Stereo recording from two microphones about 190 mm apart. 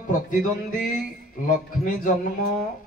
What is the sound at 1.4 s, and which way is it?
Speech, 45° left (ahead or behind).